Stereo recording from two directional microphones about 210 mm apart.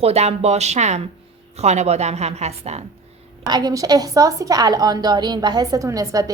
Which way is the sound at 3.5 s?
20° right (ahead or behind).